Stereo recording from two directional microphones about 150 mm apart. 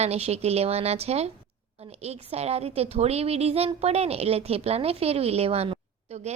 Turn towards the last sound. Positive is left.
turn(degrees=-45)  # may be behind; listen again after turning